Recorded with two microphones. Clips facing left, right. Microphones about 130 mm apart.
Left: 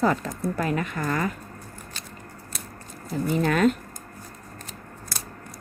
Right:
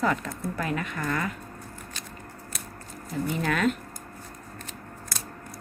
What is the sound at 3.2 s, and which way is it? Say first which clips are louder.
Speech: left 5 dB; 35° left (ahead or behind).